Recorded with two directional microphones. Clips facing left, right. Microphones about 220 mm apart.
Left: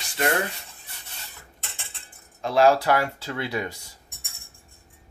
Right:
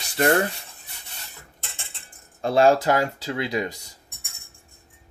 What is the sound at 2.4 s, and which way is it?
Speech, 25° right (ahead or behind).